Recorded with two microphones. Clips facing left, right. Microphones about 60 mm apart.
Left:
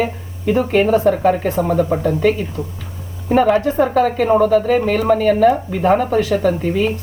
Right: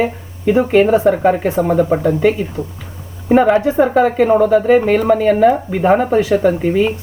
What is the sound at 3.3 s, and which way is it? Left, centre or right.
Speech, right.